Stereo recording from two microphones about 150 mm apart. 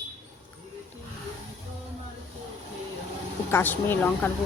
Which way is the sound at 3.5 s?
15° left (ahead or behind).